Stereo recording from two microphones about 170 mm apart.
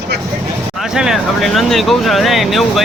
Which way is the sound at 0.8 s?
5° right (ahead or behind).